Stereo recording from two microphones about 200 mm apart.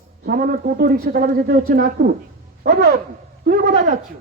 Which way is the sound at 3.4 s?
50° right (ahead or behind).